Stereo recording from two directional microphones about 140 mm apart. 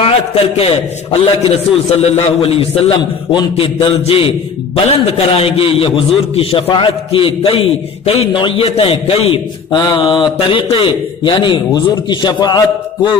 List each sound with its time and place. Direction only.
1.2 s a man's voice: 45° left (ahead or behind)